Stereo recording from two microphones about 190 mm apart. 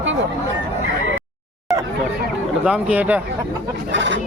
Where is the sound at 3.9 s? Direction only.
70° right (ahead or behind).